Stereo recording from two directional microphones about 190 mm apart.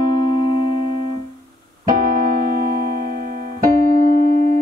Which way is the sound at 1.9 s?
50° right (ahead or behind).